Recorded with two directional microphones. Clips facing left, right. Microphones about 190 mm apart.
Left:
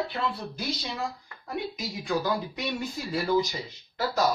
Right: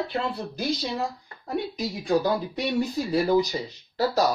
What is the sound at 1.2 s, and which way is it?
Speech, 35° right (ahead or behind).